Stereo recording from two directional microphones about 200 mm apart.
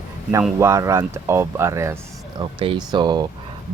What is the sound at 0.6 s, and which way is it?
Speech, 15° right (ahead or behind).